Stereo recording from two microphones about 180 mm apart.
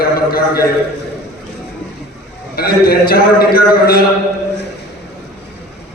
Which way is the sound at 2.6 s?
60° left (ahead or behind).